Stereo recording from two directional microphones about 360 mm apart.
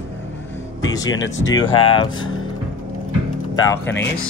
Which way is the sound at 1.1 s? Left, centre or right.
Left.